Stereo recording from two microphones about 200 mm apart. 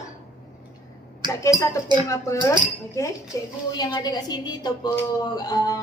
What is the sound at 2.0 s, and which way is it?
A woman's voice, 15° left (ahead or behind).